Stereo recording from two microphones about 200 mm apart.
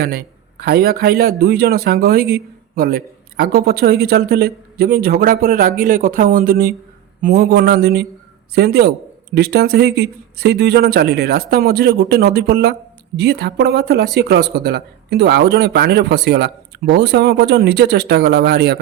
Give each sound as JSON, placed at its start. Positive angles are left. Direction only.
{"t": 0.0, "sound": "a man's voice", "side_deg": -50}